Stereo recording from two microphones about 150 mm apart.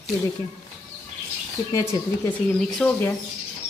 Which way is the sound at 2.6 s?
Centre (ahead or behind).